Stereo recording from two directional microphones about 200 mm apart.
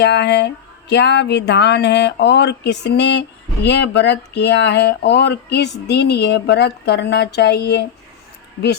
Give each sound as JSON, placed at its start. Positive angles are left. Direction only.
{"t": 0.0, "sound": "speech", "side_deg": 60}